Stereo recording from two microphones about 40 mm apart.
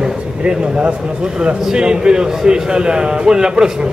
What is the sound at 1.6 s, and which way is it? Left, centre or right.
A man's voice, centre.